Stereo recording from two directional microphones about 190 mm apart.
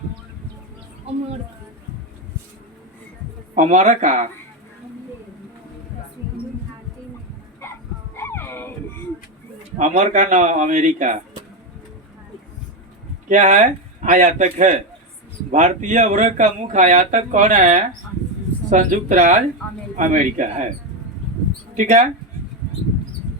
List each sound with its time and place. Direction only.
3.5 s speech: 40° right (ahead or behind)
7.6 s bow-wow: 10° left (ahead or behind)
8.1 s a sound: 10° left (ahead or behind)
9.7 s speech: 40° right (ahead or behind)
13.2 s a man's voice: 40° right (ahead or behind)
21.8 s speech: 40° right (ahead or behind)